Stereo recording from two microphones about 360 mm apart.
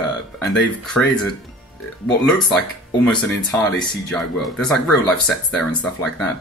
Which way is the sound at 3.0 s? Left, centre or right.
Centre.